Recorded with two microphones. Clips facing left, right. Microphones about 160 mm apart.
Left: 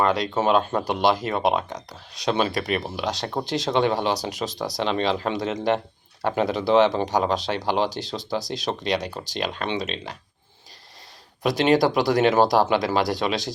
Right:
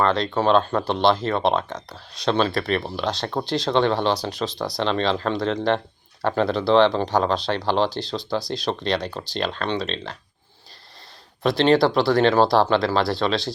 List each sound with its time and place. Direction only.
0.0 s speech: 10° left (ahead or behind)
11.4 s speech: 15° left (ahead or behind)